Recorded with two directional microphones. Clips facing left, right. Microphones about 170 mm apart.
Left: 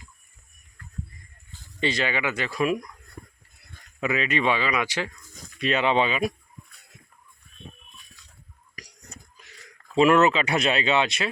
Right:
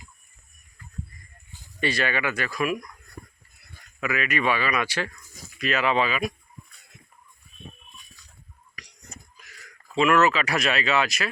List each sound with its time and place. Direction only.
1.8 s speech: 20° left (ahead or behind)
4.0 s speech: 25° left (ahead or behind)
5.5 s speech: 30° left (ahead or behind)
8.7 s whispering: 40° left (ahead or behind)
10.0 s speech: 30° left (ahead or behind)